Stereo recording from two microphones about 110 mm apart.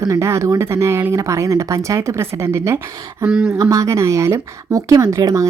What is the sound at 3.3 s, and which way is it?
Speech, 10° right (ahead or behind).